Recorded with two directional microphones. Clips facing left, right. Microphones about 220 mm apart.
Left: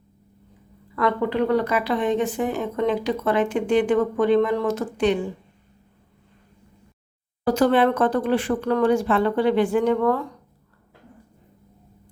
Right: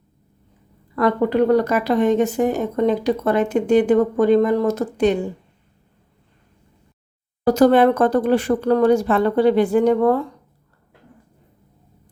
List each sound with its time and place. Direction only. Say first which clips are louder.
0.9 s a woman's voice: right 5 dB; 40° right (ahead or behind)
7.4 s a woman's voice: right 5 dB; 40° right (ahead or behind)